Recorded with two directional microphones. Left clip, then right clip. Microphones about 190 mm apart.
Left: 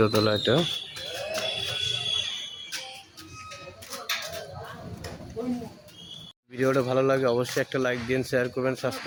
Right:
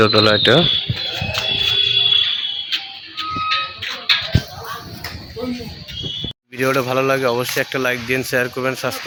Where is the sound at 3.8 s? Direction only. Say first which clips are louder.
Right 15 dB; 55° left (ahead or behind).